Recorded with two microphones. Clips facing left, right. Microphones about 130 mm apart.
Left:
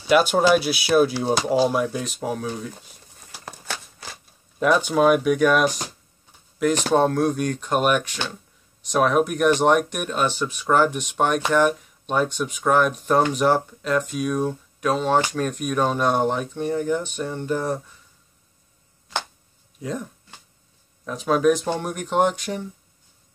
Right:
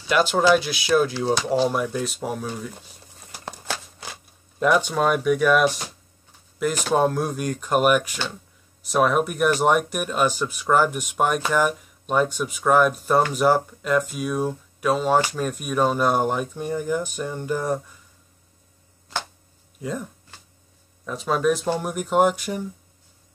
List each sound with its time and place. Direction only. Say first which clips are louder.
0.1 s speech: left 1 dB; 15° left (ahead or behind); by 2.8 s centre (ahead or behind)
4.8 s speech: left 3 dB; 5° left (ahead or behind)
6.9 s speech: left 1 dB; 5° right (ahead or behind)
19.8 s speech: even; 5° right (ahead or behind)